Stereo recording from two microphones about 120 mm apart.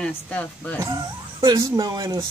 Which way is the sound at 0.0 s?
10° left (ahead or behind).